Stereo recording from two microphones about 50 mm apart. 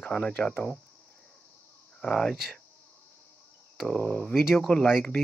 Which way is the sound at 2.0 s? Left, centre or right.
Centre.